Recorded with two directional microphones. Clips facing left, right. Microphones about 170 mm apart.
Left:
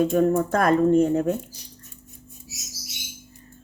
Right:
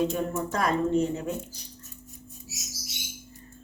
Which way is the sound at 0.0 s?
50° left (ahead or behind).